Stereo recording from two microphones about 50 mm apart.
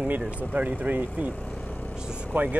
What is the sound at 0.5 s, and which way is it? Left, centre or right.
Speech, right.